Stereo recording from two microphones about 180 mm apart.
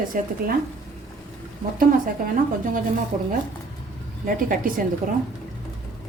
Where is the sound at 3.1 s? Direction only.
45° right (ahead or behind).